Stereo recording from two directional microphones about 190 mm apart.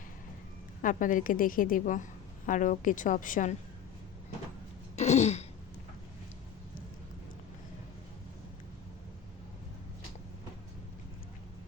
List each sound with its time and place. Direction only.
0.8 s a woman's voice: 45° left (ahead or behind)
4.9 s throat clearing: 35° left (ahead or behind)